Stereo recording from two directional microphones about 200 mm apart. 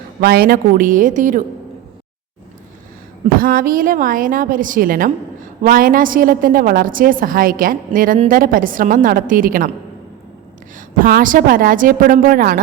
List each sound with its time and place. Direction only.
0.2 s a woman's voice: 50° right (ahead or behind)
3.3 s a woman's voice: 45° right (ahead or behind)
10.8 s a woman's voice: 45° right (ahead or behind)